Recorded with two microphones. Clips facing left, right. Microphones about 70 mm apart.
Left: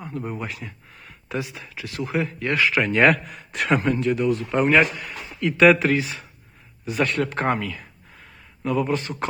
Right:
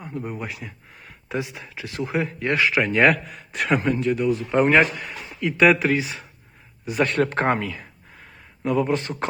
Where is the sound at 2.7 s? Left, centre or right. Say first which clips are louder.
Left 1 dB; centre.